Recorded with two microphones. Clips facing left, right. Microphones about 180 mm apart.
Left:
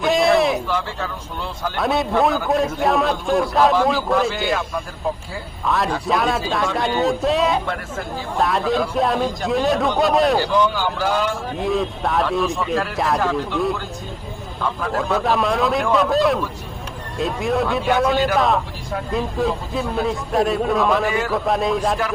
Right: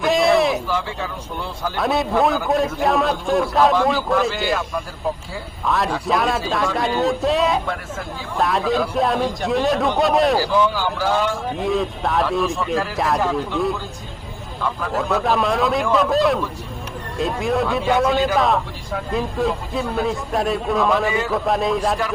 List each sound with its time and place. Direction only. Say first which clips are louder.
0.0 s a sound: even; centre (ahead or behind)
1.7 s a man's voice: even; centre (ahead or behind)
5.6 s a man's voice: even; centre (ahead or behind)
14.9 s a man's voice: even; centre (ahead or behind)